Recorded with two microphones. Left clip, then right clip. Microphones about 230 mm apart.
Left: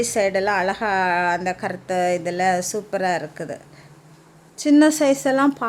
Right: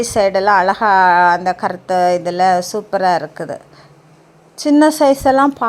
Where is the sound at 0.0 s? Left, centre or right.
Centre.